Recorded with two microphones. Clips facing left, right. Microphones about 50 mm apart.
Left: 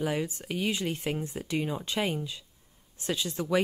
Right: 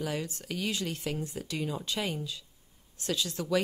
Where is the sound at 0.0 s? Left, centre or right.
Left.